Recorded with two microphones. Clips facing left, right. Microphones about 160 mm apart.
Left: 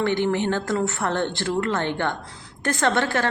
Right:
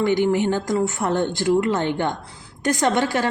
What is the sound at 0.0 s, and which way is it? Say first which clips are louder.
Speech: right 3 dB; 10° right (ahead or behind).